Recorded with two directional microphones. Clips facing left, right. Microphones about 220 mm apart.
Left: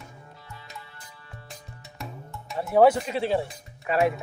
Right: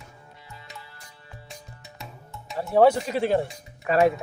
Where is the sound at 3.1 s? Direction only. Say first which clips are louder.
Right 2 dB; 45° right (ahead or behind).